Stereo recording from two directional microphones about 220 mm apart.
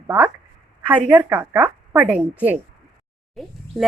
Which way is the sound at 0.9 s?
5° right (ahead or behind).